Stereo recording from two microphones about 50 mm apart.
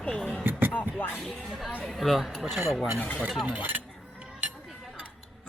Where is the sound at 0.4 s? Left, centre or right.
Right.